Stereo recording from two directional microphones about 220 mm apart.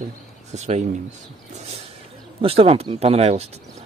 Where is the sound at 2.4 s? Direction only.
25° right (ahead or behind).